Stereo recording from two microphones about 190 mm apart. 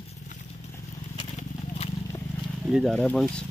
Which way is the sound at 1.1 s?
30° left (ahead or behind).